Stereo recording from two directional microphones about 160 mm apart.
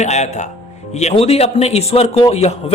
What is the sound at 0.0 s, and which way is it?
Speech, 45° left (ahead or behind).